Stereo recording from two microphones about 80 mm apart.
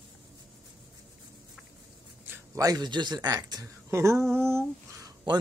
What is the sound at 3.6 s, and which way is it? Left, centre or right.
Speech, right.